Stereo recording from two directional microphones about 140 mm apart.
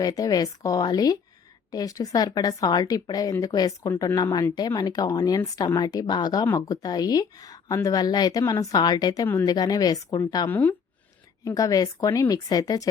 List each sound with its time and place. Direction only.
0.0 s a woman's voice: 25° left (ahead or behind)
10.5 s speech: 15° left (ahead or behind)
11.4 s a woman's voice: 25° left (ahead or behind)